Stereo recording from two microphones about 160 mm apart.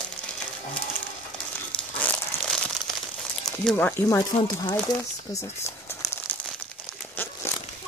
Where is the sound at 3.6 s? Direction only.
10° left (ahead or behind).